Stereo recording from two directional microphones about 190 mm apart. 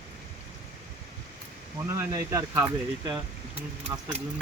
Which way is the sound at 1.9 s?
15° right (ahead or behind).